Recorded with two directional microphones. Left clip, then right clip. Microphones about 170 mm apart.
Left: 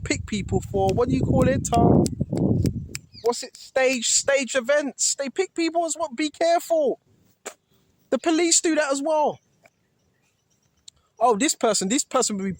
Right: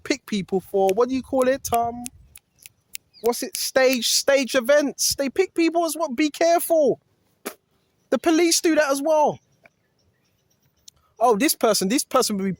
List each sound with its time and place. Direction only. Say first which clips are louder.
0.0 s speech: right 2 dB; 35° right (ahead or behind)
3.2 s speech: right 2 dB; 30° right (ahead or behind)
7.4 s dog: right 3 dB; 30° right (ahead or behind)
8.1 s speech: right 2 dB; 35° right (ahead or behind)
10.8 s speech: right 1 dB; 35° right (ahead or behind)